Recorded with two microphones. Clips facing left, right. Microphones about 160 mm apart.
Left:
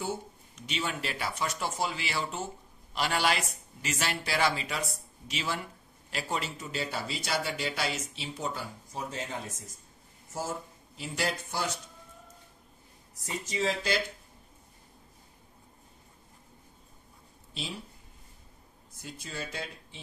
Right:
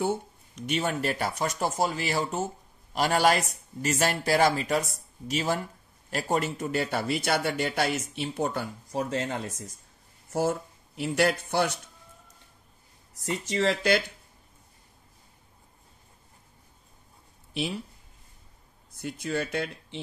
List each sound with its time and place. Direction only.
0.7 s speech: 50° right (ahead or behind); by 9.4 s 70° right (ahead or behind)
11.0 s a man's voice: 65° right (ahead or behind)
13.2 s speech: 70° right (ahead or behind)
18.9 s speech: 65° right (ahead or behind)